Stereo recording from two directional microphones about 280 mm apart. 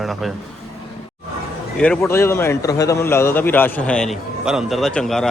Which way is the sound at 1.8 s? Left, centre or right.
Centre.